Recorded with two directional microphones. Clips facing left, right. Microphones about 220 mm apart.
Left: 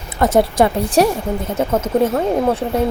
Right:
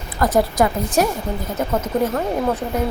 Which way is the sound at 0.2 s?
30° left (ahead or behind).